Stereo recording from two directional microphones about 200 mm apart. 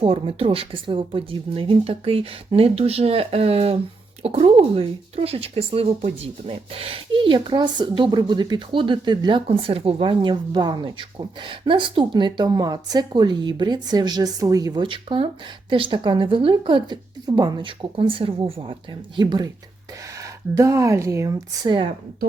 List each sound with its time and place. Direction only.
0.0 s speech: 30° right (ahead or behind)